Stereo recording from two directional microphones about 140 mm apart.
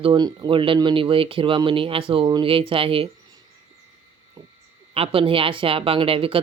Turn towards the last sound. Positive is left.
turn(degrees=-40)  # may be behind; listen again after turning